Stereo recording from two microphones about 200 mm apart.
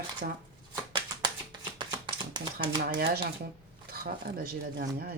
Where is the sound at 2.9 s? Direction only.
50° right (ahead or behind).